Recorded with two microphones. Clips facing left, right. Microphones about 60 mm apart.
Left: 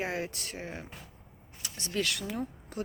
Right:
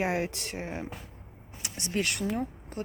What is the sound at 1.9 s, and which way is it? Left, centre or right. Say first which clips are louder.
Speech: right 3 dB; right.